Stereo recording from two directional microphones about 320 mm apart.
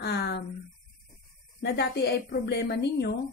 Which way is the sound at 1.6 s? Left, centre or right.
Left.